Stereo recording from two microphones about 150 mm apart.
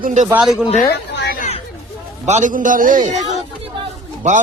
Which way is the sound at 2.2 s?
55° right (ahead or behind).